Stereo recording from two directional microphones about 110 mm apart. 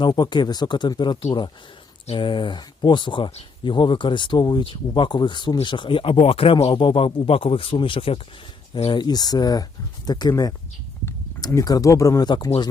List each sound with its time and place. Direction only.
0.0 s a man's voice: 40° left (ahead or behind)
8.9 s speech: 40° left (ahead or behind)